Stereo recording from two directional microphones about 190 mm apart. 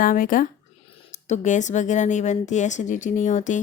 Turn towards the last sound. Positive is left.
turn(degrees=40)  # may be behind; listen again after turning